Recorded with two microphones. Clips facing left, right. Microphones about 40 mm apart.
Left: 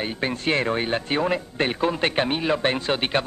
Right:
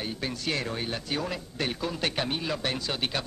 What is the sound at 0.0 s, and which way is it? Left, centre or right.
Speech, left.